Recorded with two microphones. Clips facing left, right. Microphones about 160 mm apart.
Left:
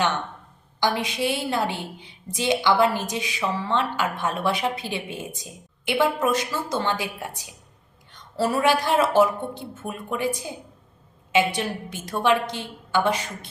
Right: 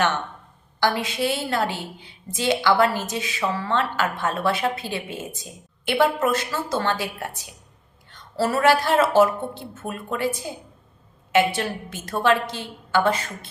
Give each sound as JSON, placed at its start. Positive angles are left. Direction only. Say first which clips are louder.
{"t": 0.8, "sound": "a woman's voice", "louder": "right 1 dB", "side_deg": 20}
{"t": 8.4, "sound": "a woman's voice", "louder": "right 2 dB", "side_deg": 20}